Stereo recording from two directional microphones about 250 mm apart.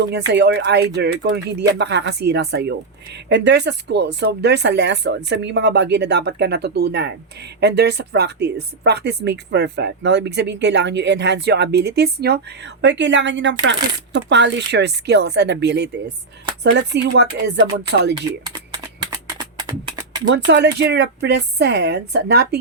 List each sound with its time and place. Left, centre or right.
0.0 s speech: right
19.4 s a sound: centre
20.2 s speech: right